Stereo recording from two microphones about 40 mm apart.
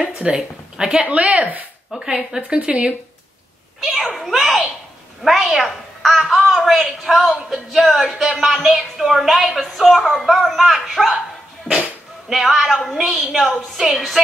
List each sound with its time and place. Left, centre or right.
0.2 s speech: centre
1.0 s speech: right
2.0 s a woman's voice: centre
2.5 s speech: right
3.8 s a woman's voice: centre
12.3 s a woman's voice: centre